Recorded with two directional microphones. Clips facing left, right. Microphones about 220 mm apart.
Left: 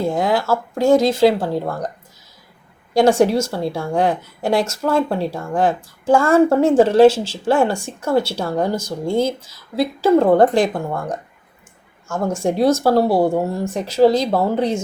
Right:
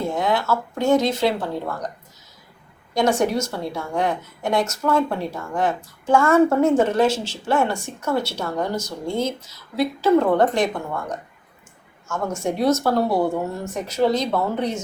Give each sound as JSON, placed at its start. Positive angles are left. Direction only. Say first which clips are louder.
{"t": 0.0, "sound": "a sound", "louder": "left 4 dB", "side_deg": 30}
{"t": 1.1, "sound": "a woman's voice", "louder": "left 7 dB", "side_deg": 30}
{"t": 2.9, "sound": "a woman's voice", "louder": "left 6 dB", "side_deg": 30}